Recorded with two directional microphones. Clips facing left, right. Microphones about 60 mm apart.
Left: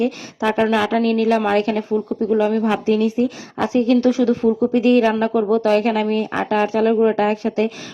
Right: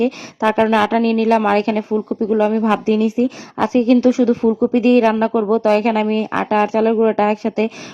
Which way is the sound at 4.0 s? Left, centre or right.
Left.